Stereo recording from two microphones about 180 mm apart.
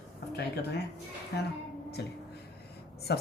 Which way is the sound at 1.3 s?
60° left (ahead or behind).